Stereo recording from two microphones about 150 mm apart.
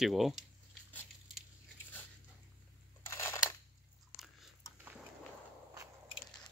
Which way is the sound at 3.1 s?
15° left (ahead or behind).